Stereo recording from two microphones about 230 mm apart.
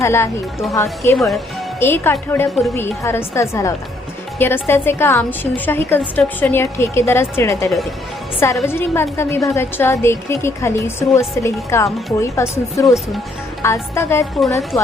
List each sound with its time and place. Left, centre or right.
0.0 s a woman's voice: centre